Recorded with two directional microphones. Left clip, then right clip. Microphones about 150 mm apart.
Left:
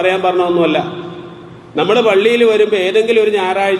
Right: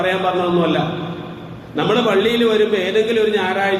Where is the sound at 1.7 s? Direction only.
30° left (ahead or behind).